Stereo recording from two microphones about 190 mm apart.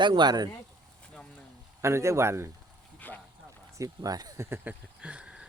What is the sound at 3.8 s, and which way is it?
Speech, 20° right (ahead or behind).